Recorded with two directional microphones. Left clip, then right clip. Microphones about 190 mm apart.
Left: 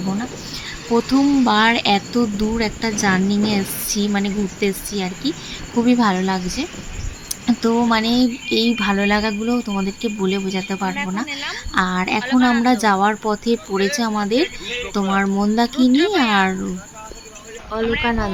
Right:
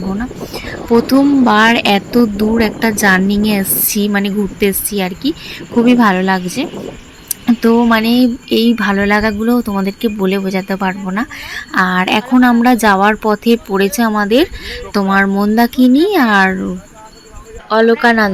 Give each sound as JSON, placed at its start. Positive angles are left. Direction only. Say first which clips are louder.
{"t": 0.6, "sound": "speech", "louder": "right 7 dB", "side_deg": -15}
{"t": 18.0, "sound": "speech", "louder": "right 10 dB", "side_deg": -25}